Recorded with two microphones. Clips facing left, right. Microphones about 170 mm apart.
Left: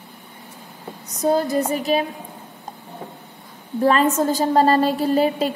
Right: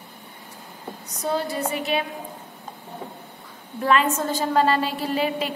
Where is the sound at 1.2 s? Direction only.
40° left (ahead or behind).